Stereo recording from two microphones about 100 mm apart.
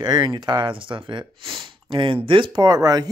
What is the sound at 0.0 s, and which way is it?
Speech, 45° right (ahead or behind).